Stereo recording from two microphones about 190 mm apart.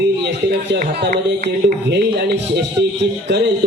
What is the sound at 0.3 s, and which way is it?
A man's voice, 60° right (ahead or behind).